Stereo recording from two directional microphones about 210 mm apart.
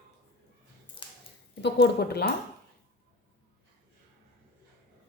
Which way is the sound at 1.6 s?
50° left (ahead or behind).